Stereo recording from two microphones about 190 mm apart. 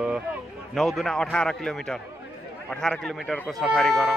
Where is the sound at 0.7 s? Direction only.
Centre (ahead or behind).